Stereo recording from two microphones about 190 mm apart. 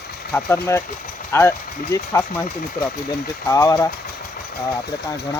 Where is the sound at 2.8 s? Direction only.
55° left (ahead or behind).